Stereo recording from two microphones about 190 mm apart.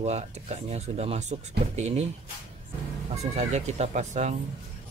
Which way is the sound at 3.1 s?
35° right (ahead or behind).